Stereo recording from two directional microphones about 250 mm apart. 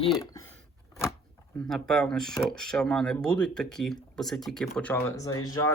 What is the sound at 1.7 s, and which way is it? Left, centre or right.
Speech, centre.